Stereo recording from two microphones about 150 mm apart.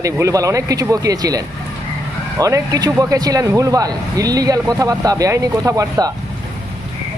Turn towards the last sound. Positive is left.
turn(degrees=-25)  # may be behind; listen again after turning